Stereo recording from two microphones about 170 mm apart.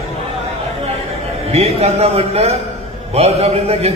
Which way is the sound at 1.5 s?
35° right (ahead or behind).